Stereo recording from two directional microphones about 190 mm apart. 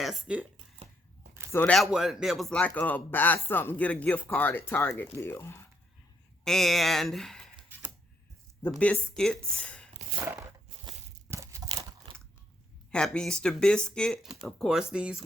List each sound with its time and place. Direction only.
0.0 s speech: 5° right (ahead or behind)
0.5 s a sound: 40° right (ahead or behind)
1.5 s speech: 10° left (ahead or behind)
6.4 s speech: centre (ahead or behind)
8.7 s speech: 5° left (ahead or behind)
10.2 s biting: 10° right (ahead or behind)
10.8 s tearing: 15° right (ahead or behind)
11.7 s a sound: 30° right (ahead or behind)
12.9 s speech: 5° left (ahead or behind)